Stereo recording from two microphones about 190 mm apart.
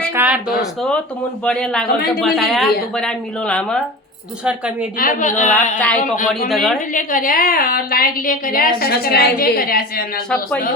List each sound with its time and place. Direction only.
0.1 s a sound: 10° right (ahead or behind)
1.5 s speech: 5° left (ahead or behind)
4.4 s speech: 5° right (ahead or behind)
4.9 s a woman's voice: 45° left (ahead or behind)
6.5 s speech: centre (ahead or behind)
6.9 s a woman's voice: 45° left (ahead or behind)